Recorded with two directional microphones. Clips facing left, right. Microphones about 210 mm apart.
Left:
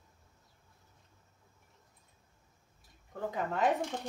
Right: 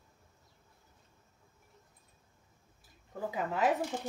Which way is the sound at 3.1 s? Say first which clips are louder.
Even; 5° right (ahead or behind).